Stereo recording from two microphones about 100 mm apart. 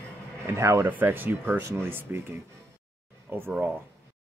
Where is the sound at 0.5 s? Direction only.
25° right (ahead or behind).